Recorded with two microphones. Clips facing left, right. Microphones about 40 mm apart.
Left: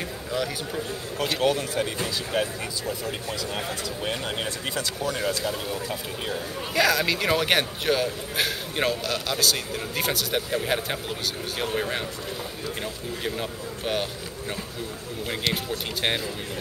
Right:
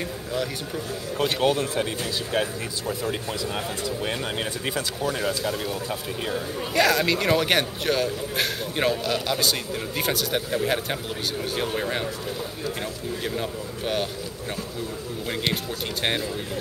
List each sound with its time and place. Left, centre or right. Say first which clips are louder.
1.3 s speech: even; centre
13.2 s speech: even; centre
15.5 s speech: even; centre